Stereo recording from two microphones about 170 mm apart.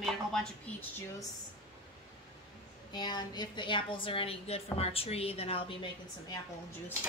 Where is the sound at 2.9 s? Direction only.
25° left (ahead or behind).